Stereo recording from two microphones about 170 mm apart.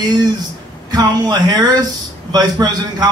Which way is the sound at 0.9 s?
25° right (ahead or behind).